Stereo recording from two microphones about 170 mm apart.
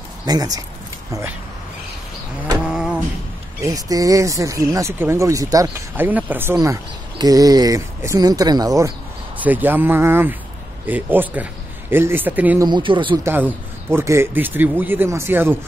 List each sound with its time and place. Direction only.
0.2 s speech: 20° right (ahead or behind)
2.6 s a sound: 5° right (ahead or behind)
3.6 s speech: 20° right (ahead or behind)
12.6 s speech: 30° right (ahead or behind)
13.2 s speech: 15° right (ahead or behind)